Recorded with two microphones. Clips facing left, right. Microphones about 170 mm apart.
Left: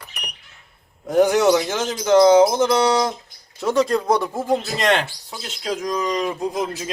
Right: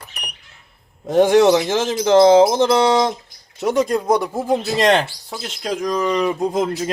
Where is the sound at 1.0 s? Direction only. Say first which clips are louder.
Right 3 dB; 25° right (ahead or behind).